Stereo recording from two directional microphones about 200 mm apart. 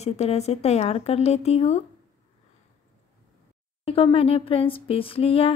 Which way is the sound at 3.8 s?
30° left (ahead or behind).